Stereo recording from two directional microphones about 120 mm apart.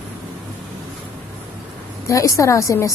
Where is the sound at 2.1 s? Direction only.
25° left (ahead or behind).